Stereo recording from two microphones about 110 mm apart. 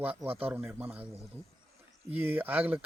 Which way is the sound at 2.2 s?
15° right (ahead or behind).